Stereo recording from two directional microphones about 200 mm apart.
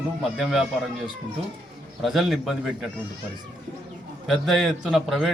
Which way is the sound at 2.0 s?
Centre (ahead or behind).